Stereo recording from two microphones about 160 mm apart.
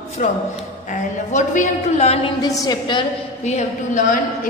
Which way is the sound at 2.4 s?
20° left (ahead or behind).